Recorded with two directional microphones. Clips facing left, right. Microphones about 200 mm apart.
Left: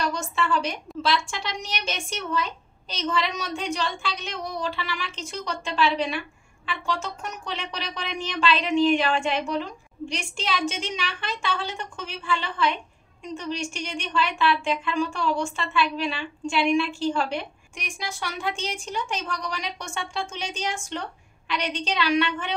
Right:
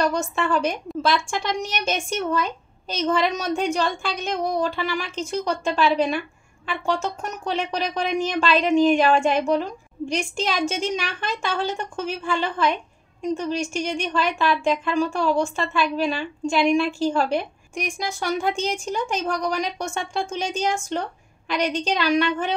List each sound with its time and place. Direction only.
0.0 s speech: 45° right (ahead or behind)